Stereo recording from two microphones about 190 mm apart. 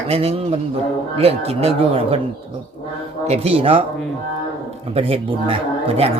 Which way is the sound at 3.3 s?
30° right (ahead or behind).